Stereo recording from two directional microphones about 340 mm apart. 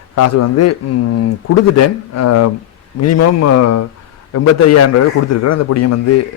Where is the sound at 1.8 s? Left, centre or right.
Left.